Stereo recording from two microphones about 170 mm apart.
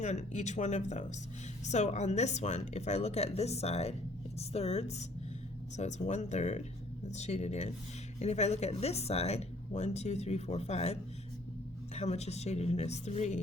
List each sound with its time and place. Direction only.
0.0 s speech: 45° left (ahead or behind)
11.9 s speech: 40° left (ahead or behind)